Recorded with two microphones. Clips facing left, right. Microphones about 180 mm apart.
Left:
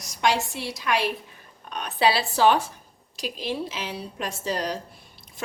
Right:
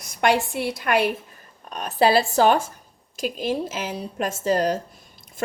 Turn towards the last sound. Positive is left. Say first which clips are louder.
# right 7 dB
turn(degrees=-50)  # may be behind; listen again after turning